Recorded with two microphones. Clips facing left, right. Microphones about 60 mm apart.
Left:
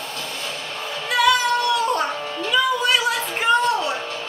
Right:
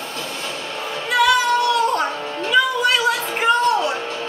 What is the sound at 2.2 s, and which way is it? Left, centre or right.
Music, right.